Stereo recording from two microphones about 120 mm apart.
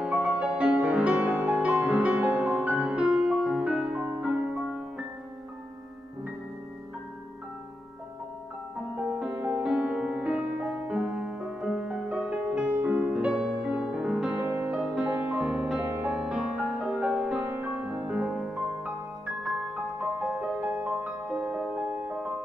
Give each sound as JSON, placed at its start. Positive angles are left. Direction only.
{"t": 0.0, "sound": "music", "side_deg": -10}
{"t": 8.9, "sound": "music", "side_deg": -5}
{"t": 19.7, "sound": "music", "side_deg": -10}